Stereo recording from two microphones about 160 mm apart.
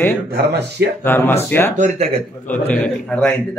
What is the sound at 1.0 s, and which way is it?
A man's voice, 10° left (ahead or behind).